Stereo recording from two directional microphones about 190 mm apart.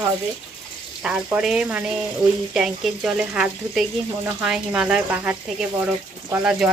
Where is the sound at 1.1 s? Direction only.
5° right (ahead or behind).